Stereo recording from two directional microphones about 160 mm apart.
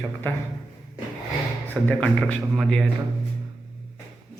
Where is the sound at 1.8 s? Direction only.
5° left (ahead or behind).